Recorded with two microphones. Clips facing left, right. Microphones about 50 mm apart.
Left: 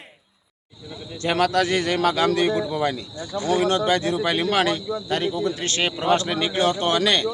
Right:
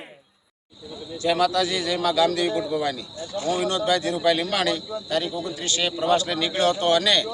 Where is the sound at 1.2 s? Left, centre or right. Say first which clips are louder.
Left 1 dB; left.